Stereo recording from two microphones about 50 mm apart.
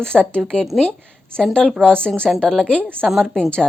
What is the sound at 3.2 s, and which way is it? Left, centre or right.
Speech, centre.